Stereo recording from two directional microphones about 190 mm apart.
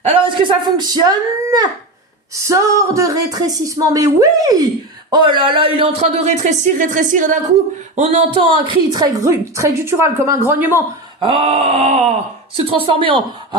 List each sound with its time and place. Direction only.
0.1 s a woman's voice: 25° right (ahead or behind); by 7.3 s 45° right (ahead or behind)
7.9 s a woman's voice: 30° right (ahead or behind); by 10.8 s 10° right (ahead or behind)
11.2 s a man's voice: 30° right (ahead or behind)